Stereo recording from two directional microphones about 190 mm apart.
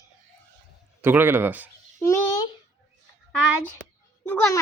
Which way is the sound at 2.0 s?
15° left (ahead or behind).